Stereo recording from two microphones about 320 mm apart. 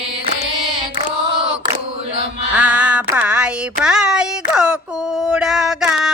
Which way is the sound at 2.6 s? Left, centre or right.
Centre.